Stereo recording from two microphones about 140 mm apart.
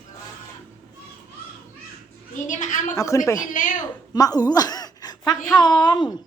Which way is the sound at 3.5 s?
65° left (ahead or behind).